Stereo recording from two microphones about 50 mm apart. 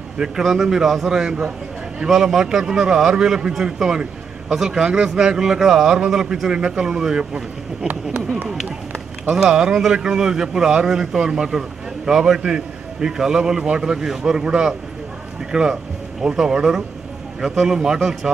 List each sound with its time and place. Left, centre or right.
0.2 s a man's voice: centre
9.4 s a man's voice: centre
15.7 s a man's voice: centre